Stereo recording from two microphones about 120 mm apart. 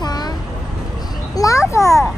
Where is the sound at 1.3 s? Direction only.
30° left (ahead or behind).